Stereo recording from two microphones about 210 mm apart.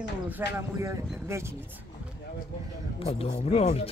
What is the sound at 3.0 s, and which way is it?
Speech, 30° left (ahead or behind).